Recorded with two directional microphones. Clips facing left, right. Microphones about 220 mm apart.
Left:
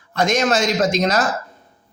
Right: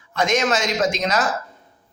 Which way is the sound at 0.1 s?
35° left (ahead or behind).